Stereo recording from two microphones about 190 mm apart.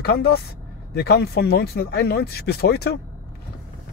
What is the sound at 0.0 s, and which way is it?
Speech, 55° left (ahead or behind).